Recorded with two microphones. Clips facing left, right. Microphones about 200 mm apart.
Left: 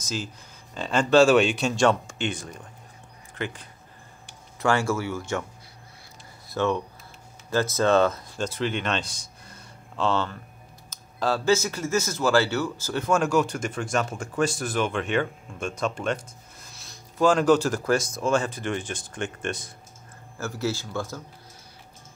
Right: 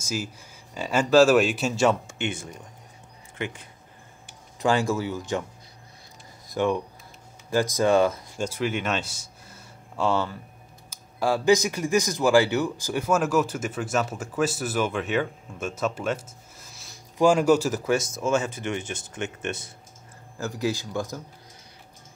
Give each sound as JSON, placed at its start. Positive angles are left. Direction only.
{"t": 0.0, "sound": "speech", "side_deg": -10}
{"t": 6.4, "sound": "a sound", "side_deg": -15}
{"t": 7.4, "sound": "speech", "side_deg": -15}